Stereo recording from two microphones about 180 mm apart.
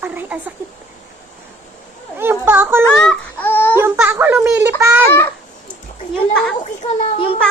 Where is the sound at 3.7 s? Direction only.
15° right (ahead or behind).